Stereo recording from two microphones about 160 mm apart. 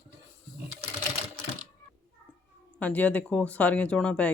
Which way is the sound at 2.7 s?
10° left (ahead or behind).